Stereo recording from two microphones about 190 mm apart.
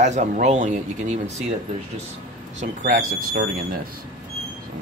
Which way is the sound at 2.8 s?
45° right (ahead or behind).